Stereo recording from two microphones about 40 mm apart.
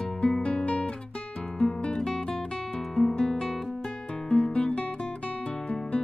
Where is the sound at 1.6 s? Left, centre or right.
Left.